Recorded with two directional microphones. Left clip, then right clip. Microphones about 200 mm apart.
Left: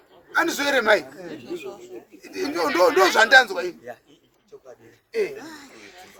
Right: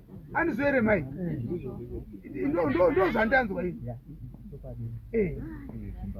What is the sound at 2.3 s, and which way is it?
Speech, 10° left (ahead or behind).